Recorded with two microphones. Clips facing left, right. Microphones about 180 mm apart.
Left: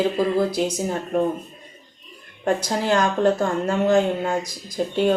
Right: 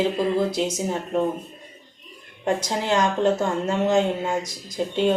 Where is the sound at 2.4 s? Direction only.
20° right (ahead or behind).